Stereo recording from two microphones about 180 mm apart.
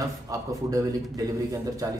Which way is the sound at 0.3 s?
20° right (ahead or behind).